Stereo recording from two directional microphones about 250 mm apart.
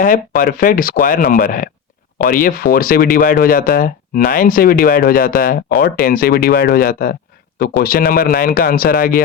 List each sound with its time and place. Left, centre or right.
0.0 s speech: left